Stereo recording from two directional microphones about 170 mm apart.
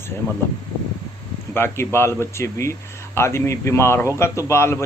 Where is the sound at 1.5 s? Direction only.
15° left (ahead or behind).